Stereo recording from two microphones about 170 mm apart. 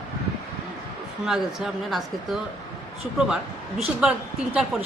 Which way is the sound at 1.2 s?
Centre (ahead or behind).